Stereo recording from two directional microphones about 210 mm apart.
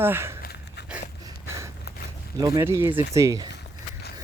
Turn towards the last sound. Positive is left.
turn(degrees=-15)  # may be behind; listen again after turning